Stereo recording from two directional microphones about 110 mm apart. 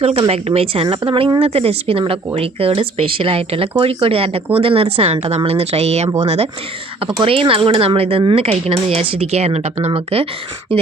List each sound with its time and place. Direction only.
0.3 s speech: 65° right (ahead or behind); by 6.5 s 80° right
7.0 s speech: 55° right (ahead or behind); by 9.7 s 75° right (ahead or behind)
9.9 s speech: 60° right (ahead or behind)